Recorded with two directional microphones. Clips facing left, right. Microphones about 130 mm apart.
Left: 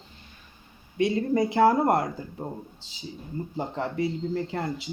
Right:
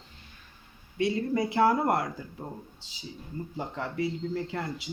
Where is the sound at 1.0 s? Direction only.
20° left (ahead or behind).